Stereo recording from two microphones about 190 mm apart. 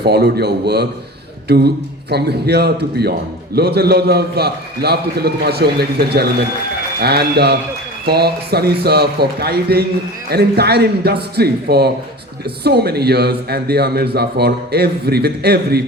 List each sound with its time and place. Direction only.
0.0 s a man's voice: 60° right (ahead or behind)